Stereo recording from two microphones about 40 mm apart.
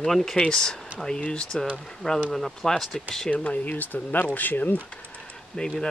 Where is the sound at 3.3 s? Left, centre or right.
Left.